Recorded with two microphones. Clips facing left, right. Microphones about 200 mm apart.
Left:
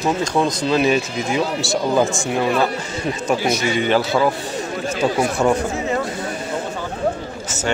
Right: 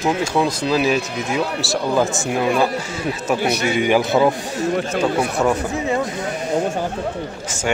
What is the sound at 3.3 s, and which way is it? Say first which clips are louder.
Speech: right 1 dB; 60° right (ahead or behind).